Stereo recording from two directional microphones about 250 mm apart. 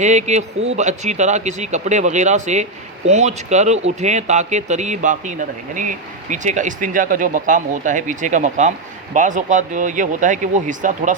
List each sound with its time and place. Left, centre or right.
0.0 s speech: right